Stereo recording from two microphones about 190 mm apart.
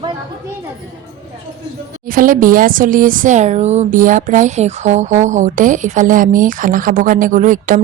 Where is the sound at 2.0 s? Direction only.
45° right (ahead or behind).